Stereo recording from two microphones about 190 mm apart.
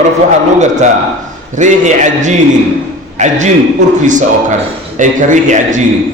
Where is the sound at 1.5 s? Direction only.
40° right (ahead or behind).